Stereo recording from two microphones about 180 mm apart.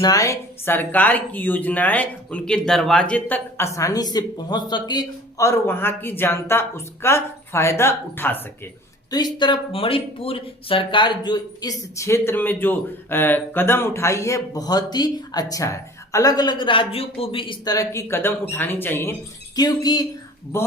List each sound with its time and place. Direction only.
0.0 s speech: 20° left (ahead or behind)
9.0 s speech: 20° left (ahead or behind)
19.5 s speech: 20° left (ahead or behind)